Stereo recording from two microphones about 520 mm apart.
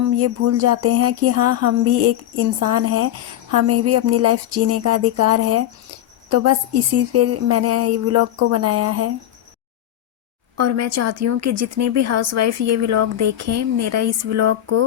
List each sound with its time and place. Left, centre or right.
0.0 s speech: right
10.6 s speech: right